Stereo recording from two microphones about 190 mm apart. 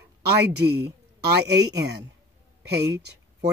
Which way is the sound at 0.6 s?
60° right (ahead or behind).